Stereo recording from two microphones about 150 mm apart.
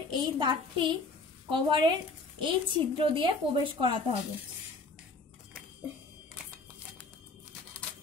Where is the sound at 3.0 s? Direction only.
35° right (ahead or behind).